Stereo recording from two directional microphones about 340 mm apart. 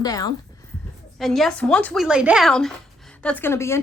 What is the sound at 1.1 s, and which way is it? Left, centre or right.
A woman's voice, centre.